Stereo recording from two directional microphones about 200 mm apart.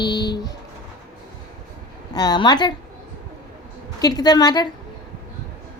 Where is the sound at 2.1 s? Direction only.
20° left (ahead or behind).